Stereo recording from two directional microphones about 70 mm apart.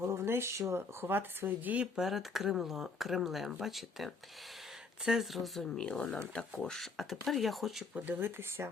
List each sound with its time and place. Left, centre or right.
0.0 s speech: right
2.0 s speech: centre
5.7 s speech: centre
7.9 s speech: right